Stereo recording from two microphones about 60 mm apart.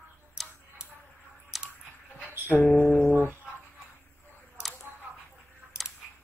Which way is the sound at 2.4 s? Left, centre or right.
Left.